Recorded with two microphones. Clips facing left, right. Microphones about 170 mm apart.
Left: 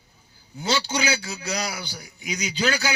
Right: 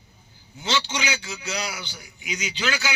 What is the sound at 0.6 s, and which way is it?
A man's voice, 35° left (ahead or behind).